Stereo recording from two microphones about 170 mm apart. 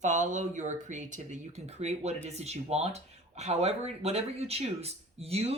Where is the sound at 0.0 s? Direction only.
45° right (ahead or behind).